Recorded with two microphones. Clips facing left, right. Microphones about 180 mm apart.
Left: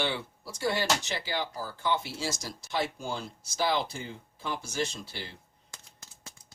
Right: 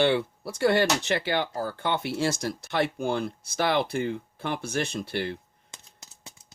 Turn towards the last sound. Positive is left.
turn(degrees=-60)  # may be behind; listen again after turning